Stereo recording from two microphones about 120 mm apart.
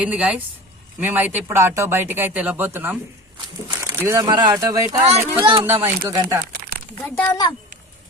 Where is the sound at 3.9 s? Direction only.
20° right (ahead or behind).